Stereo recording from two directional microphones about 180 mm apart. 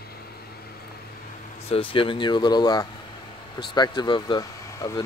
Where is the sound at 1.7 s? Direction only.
30° left (ahead or behind).